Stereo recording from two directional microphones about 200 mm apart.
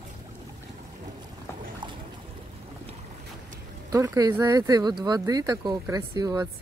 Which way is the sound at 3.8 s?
15° right (ahead or behind).